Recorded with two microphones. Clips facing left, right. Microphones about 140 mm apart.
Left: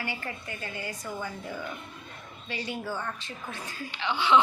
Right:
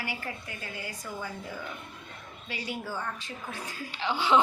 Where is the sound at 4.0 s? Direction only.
35° right (ahead or behind).